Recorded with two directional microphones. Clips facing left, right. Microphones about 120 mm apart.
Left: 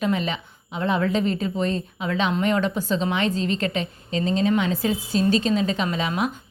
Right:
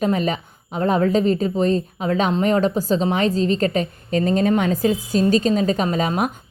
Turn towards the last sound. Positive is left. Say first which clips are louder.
# right 4 dB
turn(degrees=-45)  # may be behind; listen again after turning